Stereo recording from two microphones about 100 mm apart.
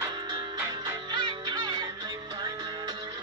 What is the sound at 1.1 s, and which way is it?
Music, 45° right (ahead or behind).